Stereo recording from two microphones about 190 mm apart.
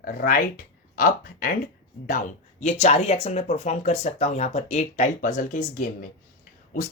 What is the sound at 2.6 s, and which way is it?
Speech, 35° left (ahead or behind).